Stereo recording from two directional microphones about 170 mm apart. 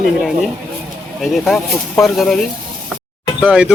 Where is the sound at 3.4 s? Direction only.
5° right (ahead or behind).